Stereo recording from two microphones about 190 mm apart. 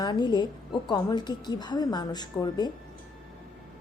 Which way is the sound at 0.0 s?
20° left (ahead or behind).